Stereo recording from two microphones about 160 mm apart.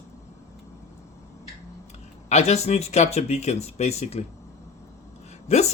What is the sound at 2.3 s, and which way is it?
Speech, 45° left (ahead or behind).